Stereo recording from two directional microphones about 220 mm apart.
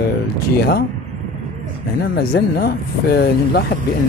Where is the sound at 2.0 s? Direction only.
45° left (ahead or behind).